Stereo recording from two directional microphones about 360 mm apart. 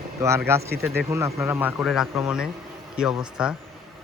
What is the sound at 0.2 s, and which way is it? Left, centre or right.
Speech, centre.